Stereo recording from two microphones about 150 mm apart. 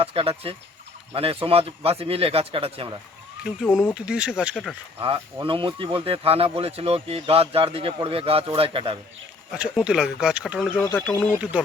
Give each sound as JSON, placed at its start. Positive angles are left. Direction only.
{"t": 0.0, "sound": "speech", "side_deg": -40}
{"t": 3.4, "sound": "speech", "side_deg": -5}
{"t": 4.9, "sound": "speech", "side_deg": -35}
{"t": 9.5, "sound": "speech", "side_deg": -5}
{"t": 10.8, "sound": "speech", "side_deg": 10}